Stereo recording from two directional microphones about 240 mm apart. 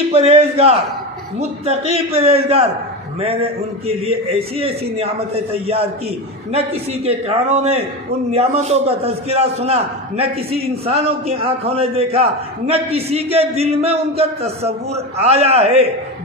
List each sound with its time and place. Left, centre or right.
0.1 s a man's voice: right
3.8 s a man's voice: right
6.9 s a man's voice: right